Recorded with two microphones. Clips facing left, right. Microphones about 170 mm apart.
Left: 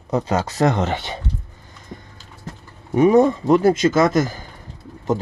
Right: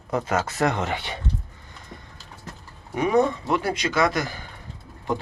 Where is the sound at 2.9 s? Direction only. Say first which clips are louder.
Left 7 dB; 40° left (ahead or behind).